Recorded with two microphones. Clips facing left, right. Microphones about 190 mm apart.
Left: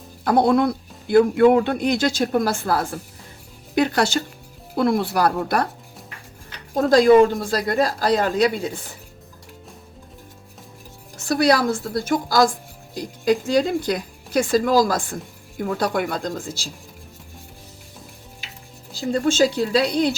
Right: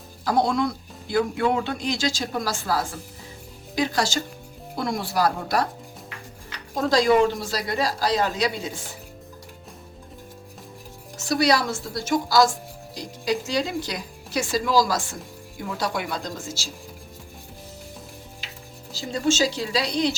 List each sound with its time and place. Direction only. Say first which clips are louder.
0.3 s speech: left 5 dB; 55° left (ahead or behind)
6.7 s speech: left 6 dB; 55° left (ahead or behind)
11.3 s speech: left 3 dB; 55° left (ahead or behind)
18.9 s speech: left 4 dB; 55° left (ahead or behind)